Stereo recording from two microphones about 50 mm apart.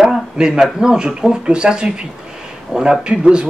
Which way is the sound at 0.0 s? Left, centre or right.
Centre.